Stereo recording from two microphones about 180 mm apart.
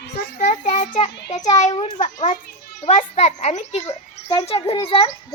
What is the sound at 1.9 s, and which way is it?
Speech, 45° left (ahead or behind).